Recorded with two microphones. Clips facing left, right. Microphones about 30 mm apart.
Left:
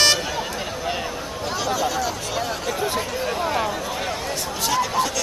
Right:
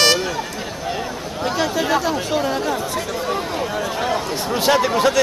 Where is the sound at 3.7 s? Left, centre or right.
Centre.